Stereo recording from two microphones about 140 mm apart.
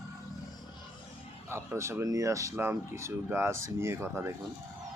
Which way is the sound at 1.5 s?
20° right (ahead or behind).